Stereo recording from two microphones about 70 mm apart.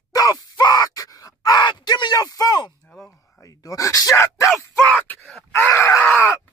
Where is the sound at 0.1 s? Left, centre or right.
Left.